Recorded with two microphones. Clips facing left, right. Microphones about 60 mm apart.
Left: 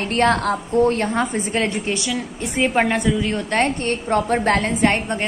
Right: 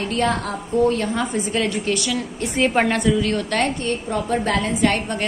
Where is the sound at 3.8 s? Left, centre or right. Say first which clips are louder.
Left 3 dB; left.